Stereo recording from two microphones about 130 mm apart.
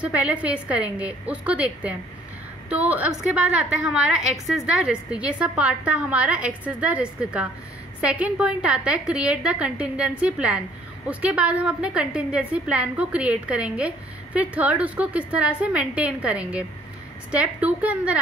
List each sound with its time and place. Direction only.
0.0 s a woman's voice: 10° right (ahead or behind)